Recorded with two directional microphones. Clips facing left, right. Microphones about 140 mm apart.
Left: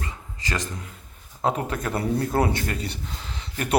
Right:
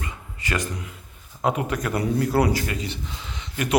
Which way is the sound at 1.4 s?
30° left (ahead or behind).